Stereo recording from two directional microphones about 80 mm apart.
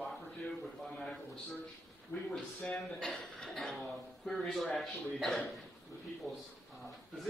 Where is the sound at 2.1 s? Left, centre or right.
Centre.